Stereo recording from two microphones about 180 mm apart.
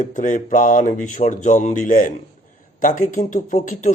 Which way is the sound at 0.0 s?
45° left (ahead or behind).